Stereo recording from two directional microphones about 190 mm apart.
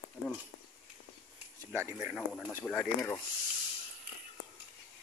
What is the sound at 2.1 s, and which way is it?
Speech, centre (ahead or behind).